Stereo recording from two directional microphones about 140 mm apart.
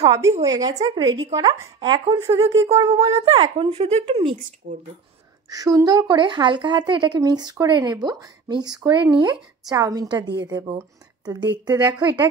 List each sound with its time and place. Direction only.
0.4 s speech: 25° right (ahead or behind)
2.1 s speech: 20° right (ahead or behind)
2.9 s speech: 45° right (ahead or behind)
4.6 s speech: 65° right (ahead or behind)
5.5 s a woman's voice: 25° right (ahead or behind)